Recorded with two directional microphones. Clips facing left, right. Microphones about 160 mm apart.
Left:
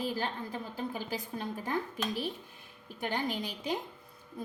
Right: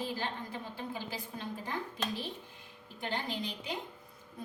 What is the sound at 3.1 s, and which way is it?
Speech, 45° left (ahead or behind).